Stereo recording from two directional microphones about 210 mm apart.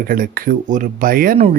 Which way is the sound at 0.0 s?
40° right (ahead or behind).